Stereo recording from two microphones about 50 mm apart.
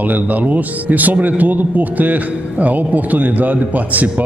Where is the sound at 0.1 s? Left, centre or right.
Right.